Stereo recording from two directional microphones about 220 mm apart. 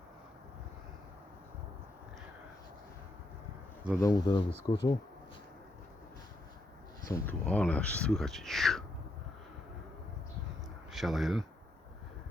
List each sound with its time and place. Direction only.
4.0 s speech: 20° left (ahead or behind)
7.1 s speech: 15° left (ahead or behind)
10.9 s speech: centre (ahead or behind)